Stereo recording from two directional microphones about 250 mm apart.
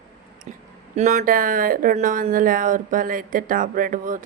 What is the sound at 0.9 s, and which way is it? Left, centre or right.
A woman's voice, right.